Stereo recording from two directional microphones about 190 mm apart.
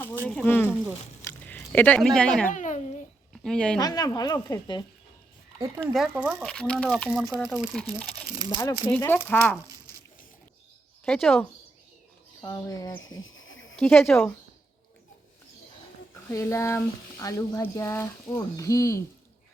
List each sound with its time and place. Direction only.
0.3 s speech: 5° left (ahead or behind)
1.2 s biting: 10° left (ahead or behind)
2.5 s a child's voice: 40° left (ahead or behind)
3.4 s speech: 5° left (ahead or behind)
3.8 s speech: 20° left (ahead or behind)
5.5 s speech: 15° right (ahead or behind)
5.8 s speech: centre (ahead or behind)
8.4 s speech: 20° right (ahead or behind)
8.9 s speech: 10° left (ahead or behind)
11.0 s speech: 5° left (ahead or behind)
12.4 s speech: 15° left (ahead or behind)
13.0 s a sound: 90° left
13.7 s speech: 10° left (ahead or behind)
16.3 s speech: 15° left (ahead or behind)